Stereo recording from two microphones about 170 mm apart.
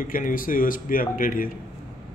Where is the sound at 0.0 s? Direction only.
55° left (ahead or behind).